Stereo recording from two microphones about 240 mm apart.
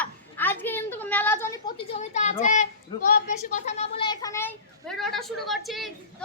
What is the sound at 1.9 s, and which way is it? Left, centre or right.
A woman's voice, left.